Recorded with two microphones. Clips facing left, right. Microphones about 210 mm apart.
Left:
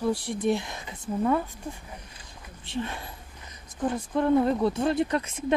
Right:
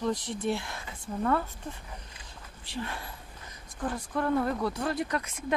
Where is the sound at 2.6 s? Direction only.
20° left (ahead or behind).